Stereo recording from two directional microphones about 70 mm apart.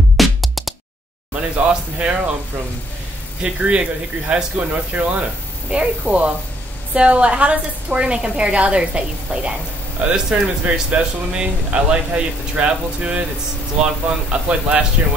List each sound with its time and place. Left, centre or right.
0.2 s music: centre
1.3 s a woman's voice: centre
3.4 s a woman's voice: centre
14.3 s a woman's voice: centre